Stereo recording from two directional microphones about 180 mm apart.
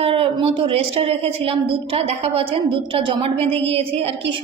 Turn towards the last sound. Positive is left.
turn(degrees=-35)  # may be behind; listen again after turning